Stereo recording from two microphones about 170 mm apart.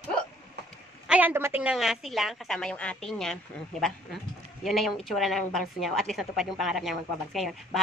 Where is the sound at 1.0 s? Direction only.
10° right (ahead or behind).